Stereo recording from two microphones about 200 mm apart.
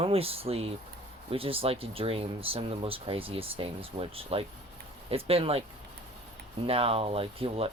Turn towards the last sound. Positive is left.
turn(degrees=-30)  # may be behind; listen again after turning